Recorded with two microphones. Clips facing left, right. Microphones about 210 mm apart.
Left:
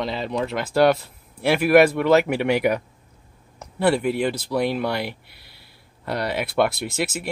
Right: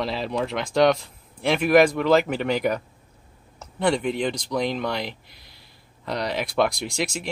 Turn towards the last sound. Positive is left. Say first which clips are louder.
# left 2 dB
turn(degrees=5)  # may be behind; listen again after turning